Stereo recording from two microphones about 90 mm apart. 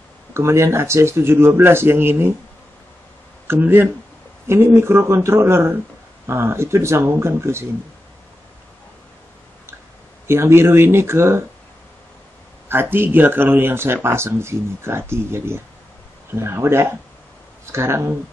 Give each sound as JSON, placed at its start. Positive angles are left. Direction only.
{"t": 0.3, "sound": "speech", "side_deg": -30}
{"t": 3.4, "sound": "speech", "side_deg": -20}
{"t": 10.2, "sound": "speech", "side_deg": -30}
{"t": 12.9, "sound": "speech", "side_deg": -20}